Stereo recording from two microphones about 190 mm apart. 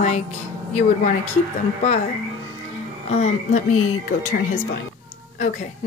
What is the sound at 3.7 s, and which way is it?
Speech, 90° left.